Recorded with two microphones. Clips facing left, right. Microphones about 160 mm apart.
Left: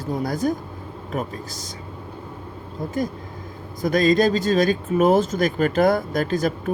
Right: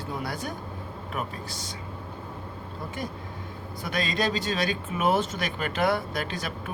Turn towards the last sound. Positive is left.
turn(degrees=45)  # may be behind; listen again after turning